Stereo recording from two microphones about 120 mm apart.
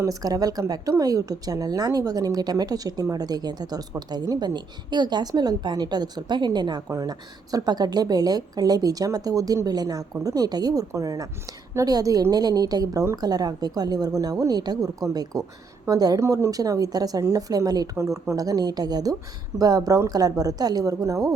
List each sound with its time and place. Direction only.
0.0 s a woman's voice: 30° right (ahead or behind)